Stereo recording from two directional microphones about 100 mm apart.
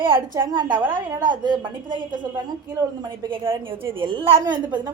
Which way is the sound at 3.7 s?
65° right (ahead or behind).